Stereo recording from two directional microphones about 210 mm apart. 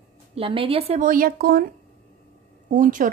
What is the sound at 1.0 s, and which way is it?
Speech, 40° right (ahead or behind).